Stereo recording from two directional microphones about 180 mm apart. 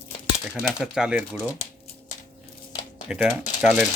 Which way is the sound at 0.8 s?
5° right (ahead or behind).